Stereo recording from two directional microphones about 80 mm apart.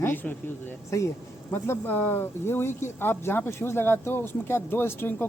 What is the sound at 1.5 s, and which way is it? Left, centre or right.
Speech, left.